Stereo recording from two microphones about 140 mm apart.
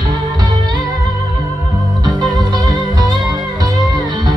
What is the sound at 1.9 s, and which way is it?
Music, 30° right (ahead or behind).